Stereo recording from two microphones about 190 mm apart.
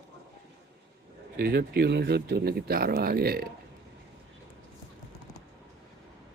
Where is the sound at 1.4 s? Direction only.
55° right (ahead or behind).